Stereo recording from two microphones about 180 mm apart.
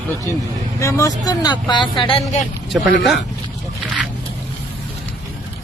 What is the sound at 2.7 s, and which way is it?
Speech, centre (ahead or behind).